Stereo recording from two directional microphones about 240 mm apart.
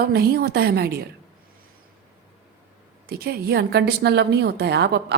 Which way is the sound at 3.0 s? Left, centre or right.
Right.